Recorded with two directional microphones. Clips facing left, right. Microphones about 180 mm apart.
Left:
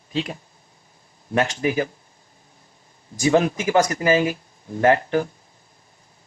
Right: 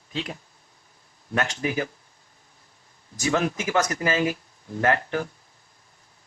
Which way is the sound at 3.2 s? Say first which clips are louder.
Left 6 dB; 30° left (ahead or behind).